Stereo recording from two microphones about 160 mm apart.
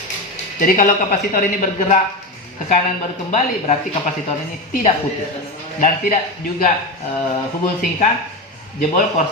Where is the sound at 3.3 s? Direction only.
45° left (ahead or behind).